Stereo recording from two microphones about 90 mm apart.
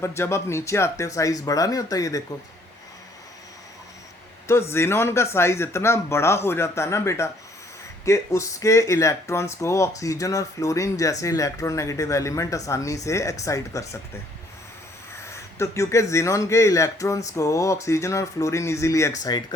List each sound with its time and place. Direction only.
0.0 s speech: 30° left (ahead or behind)
4.4 s speech: 30° left (ahead or behind)
15.3 s speech: 30° left (ahead or behind)
19.2 s speech: 50° left (ahead or behind)